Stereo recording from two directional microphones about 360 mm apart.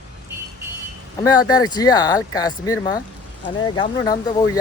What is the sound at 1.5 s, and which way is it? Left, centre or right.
Speech, centre.